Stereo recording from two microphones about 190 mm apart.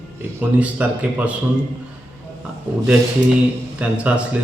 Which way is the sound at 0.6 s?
5° right (ahead or behind).